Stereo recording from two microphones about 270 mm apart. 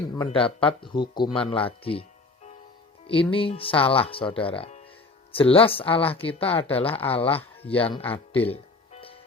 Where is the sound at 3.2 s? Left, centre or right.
Centre.